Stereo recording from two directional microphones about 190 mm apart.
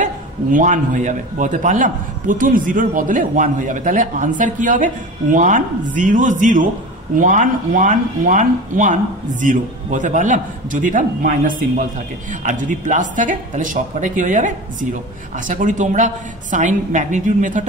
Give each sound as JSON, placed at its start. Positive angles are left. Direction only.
{"t": 0.0, "sound": "a man's voice", "side_deg": -45}